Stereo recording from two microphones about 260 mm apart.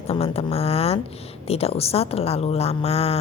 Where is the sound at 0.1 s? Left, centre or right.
Left.